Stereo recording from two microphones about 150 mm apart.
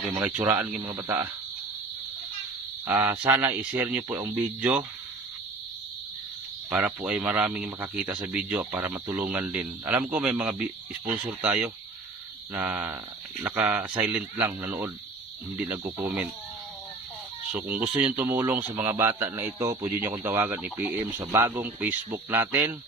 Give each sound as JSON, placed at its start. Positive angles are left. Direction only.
{"t": 0.2, "sound": "speech", "side_deg": -10}
{"t": 0.7, "sound": "speech", "side_deg": -30}
{"t": 1.0, "sound": "speech", "side_deg": -15}
{"t": 2.8, "sound": "speech", "side_deg": -15}
{"t": 6.7, "sound": "speech", "side_deg": -10}
{"t": 17.5, "sound": "speech", "side_deg": -10}